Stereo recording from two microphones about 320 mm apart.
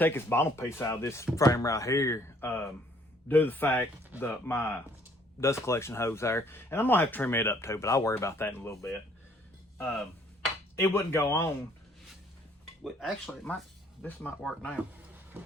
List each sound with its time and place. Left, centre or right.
0.0 s speech: centre
12.8 s speech: centre